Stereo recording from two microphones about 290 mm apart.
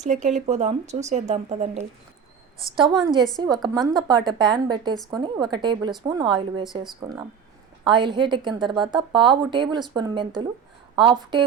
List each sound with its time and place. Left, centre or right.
0.0 s speech: right
3.4 s a woman's voice: centre
7.9 s a woman's voice: centre